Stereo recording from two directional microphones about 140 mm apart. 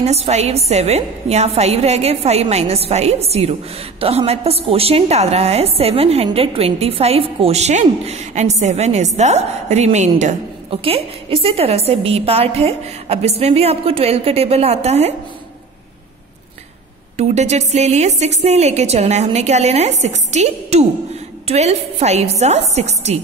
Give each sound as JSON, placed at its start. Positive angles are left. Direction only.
{"t": 0.0, "sound": "a woman's voice", "side_deg": -50}
{"t": 10.7, "sound": "a woman's voice", "side_deg": -40}
{"t": 17.2, "sound": "a woman's voice", "side_deg": -50}